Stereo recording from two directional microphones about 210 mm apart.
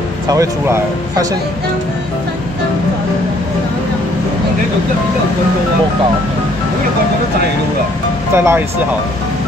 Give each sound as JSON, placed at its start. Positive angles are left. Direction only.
{"t": 0.3, "sound": "speech", "side_deg": -15}
{"t": 8.4, "sound": "speech", "side_deg": -10}